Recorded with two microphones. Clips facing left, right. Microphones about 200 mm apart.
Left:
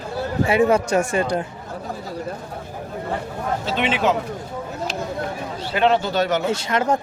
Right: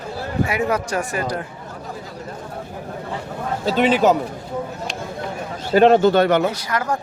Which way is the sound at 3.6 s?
40° right (ahead or behind).